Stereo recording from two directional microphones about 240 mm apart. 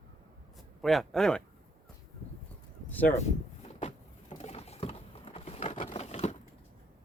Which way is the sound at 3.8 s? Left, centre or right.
Left.